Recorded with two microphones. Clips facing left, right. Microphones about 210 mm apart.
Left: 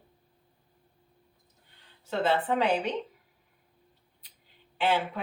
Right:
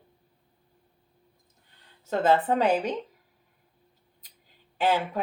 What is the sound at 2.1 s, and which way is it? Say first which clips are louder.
Speech: right 4 dB; 45° right (ahead or behind).